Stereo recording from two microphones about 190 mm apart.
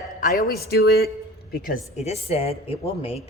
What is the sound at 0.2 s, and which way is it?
A woman's voice, 50° left (ahead or behind).